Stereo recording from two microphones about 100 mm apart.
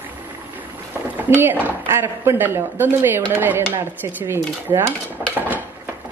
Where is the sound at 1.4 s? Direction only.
20° right (ahead or behind).